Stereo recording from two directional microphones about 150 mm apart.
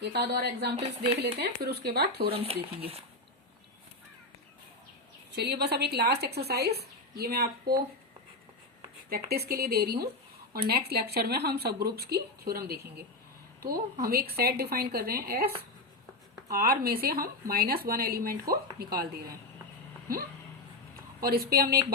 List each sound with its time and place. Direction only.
0.1 s speech: 90° right
0.8 s speech: 40° right (ahead or behind)
1.4 s speech: 90° right
2.3 s speech: 40° right (ahead or behind)
5.3 s speech: 90° right
9.0 s speech: 90° right
20.1 s speech: 80° right